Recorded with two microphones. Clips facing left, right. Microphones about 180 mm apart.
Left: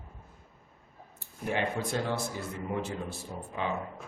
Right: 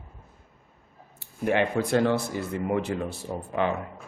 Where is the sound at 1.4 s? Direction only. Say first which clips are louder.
Right 7 dB; 70° right (ahead or behind).